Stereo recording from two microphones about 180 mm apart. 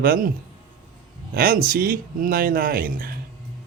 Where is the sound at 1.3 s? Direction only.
55° right (ahead or behind).